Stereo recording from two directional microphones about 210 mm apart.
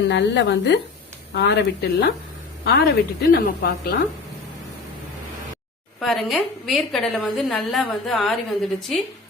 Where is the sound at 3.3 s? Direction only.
45° left (ahead or behind).